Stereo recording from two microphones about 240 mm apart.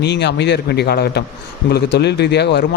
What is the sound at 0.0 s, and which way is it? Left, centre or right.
Speech, left.